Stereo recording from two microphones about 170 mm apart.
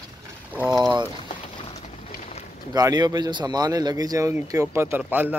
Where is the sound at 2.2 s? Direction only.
40° left (ahead or behind).